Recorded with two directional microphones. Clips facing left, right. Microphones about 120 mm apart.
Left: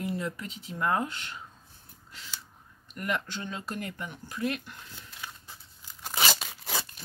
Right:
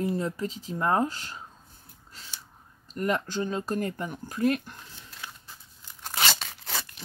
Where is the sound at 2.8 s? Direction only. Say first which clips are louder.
Right 5 dB; 35° right (ahead or behind).